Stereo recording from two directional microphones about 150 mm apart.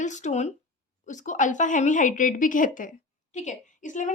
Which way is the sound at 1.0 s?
55° left (ahead or behind).